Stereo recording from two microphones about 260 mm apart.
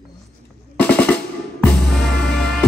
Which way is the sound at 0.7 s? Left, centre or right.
Centre.